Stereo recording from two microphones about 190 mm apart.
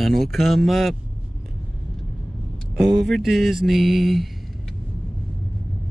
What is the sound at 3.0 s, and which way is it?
A man's voice, centre (ahead or behind).